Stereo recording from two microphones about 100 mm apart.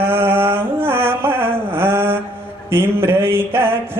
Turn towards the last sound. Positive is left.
turn(degrees=-25)  # may be behind; listen again after turning